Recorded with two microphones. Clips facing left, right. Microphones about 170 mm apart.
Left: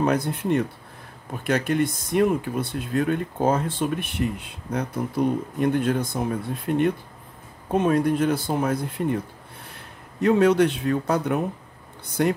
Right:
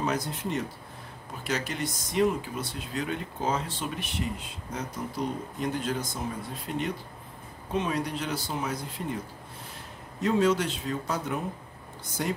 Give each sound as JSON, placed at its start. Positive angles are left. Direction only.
{"t": 0.0, "sound": "speech", "side_deg": 60}
{"t": 10.2, "sound": "speech", "side_deg": 60}